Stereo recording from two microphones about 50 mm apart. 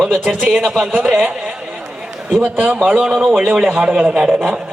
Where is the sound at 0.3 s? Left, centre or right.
Right.